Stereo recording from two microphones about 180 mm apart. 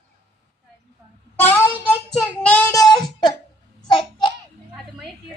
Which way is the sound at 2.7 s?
20° left (ahead or behind).